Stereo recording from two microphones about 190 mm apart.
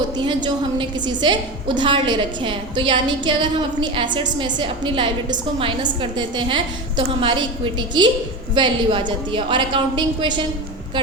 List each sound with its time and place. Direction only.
0.2 s a woman's voice: 25° right (ahead or behind)